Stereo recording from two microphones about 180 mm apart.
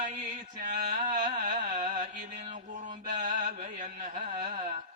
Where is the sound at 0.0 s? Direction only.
45° right (ahead or behind).